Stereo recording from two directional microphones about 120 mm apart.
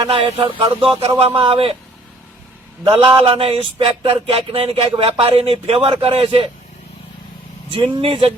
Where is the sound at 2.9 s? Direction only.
50° right (ahead or behind).